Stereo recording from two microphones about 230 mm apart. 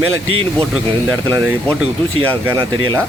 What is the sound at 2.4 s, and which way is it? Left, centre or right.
Speech, centre.